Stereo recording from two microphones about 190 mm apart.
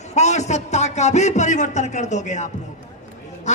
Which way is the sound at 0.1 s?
35° left (ahead or behind).